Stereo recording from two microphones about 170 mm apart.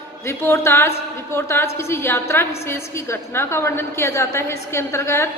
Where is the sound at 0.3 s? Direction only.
15° left (ahead or behind).